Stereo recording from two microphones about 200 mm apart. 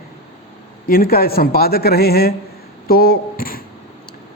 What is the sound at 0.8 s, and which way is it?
Speech, 45° left (ahead or behind).